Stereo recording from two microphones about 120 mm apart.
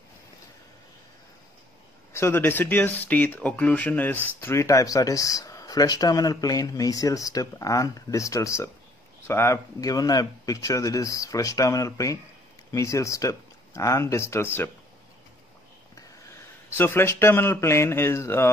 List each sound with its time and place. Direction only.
2.1 s speech: 20° left (ahead or behind)
15.9 s speech: 20° left (ahead or behind)